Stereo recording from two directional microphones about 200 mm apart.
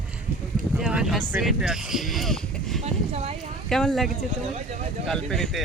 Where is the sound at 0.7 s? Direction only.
5° right (ahead or behind).